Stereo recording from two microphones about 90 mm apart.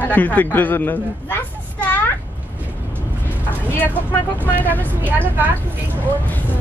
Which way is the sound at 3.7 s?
25° left (ahead or behind).